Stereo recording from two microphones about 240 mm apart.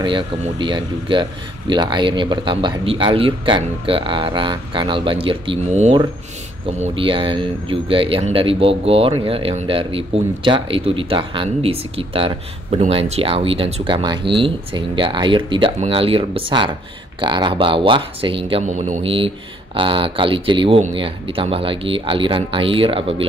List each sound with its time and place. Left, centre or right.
0.0 s speech: centre